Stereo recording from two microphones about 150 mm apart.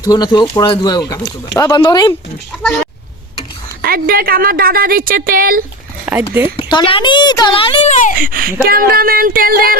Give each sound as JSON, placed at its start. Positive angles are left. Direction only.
{"t": 0.0, "sound": "speech", "side_deg": 30}
{"t": 3.8, "sound": "a woman's voice", "side_deg": -80}
{"t": 6.1, "sound": "a sound", "side_deg": -10}
{"t": 6.6, "sound": "a child's voice", "side_deg": 35}
{"t": 8.2, "sound": "a woman's voice", "side_deg": -75}